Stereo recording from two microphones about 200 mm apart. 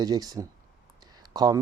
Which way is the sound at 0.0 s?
20° right (ahead or behind).